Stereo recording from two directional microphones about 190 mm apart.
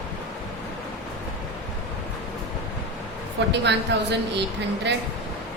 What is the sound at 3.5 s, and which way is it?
Speech, 65° right (ahead or behind).